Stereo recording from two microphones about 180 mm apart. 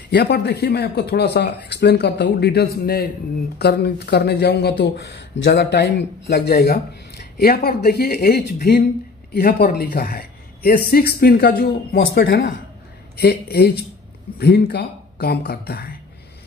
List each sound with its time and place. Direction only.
0.1 s a man's voice: 65° left (ahead or behind)